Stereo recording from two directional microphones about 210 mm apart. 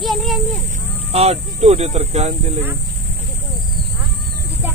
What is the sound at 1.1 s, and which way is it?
Speech, 30° right (ahead or behind).